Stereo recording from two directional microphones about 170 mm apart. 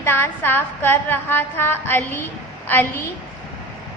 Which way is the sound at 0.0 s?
10° left (ahead or behind).